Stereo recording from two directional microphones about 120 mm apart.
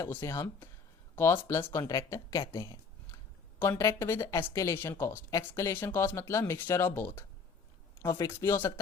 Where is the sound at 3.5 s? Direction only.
15° left (ahead or behind).